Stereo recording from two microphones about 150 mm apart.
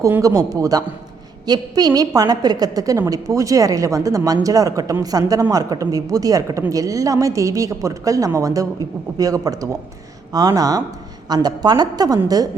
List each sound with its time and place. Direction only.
0.0 s speech: 20° right (ahead or behind)